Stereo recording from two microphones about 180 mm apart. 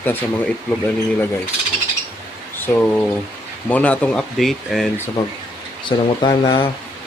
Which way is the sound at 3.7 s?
10° left (ahead or behind).